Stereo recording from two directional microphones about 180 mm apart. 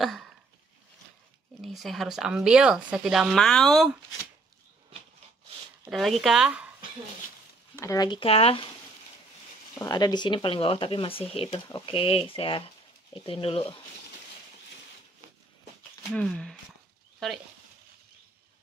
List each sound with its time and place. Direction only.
0.0 s a sound: centre (ahead or behind)
1.6 s speech: centre (ahead or behind)
5.9 s speech: centre (ahead or behind)
7.7 s speech: 15° left (ahead or behind); by 8.6 s 35° left (ahead or behind)
9.8 s speech: 20° left (ahead or behind)
16.2 s speech: 5° left (ahead or behind)